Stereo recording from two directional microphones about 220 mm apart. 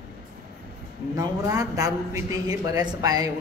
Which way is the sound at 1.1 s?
15° right (ahead or behind).